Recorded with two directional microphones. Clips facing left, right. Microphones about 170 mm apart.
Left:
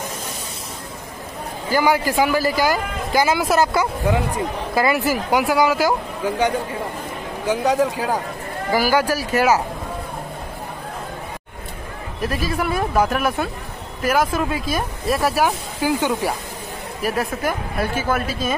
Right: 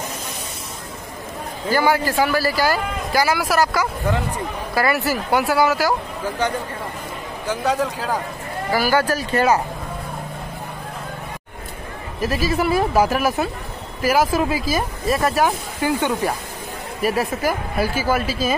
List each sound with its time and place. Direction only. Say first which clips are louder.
1.7 s speech: even; 15° left (ahead or behind)
12.2 s speech: right 3 dB; centre (ahead or behind)
17.0 s speech: right 2 dB; 5° right (ahead or behind)